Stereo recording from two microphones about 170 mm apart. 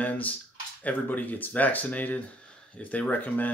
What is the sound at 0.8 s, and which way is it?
Speech, 10° left (ahead or behind).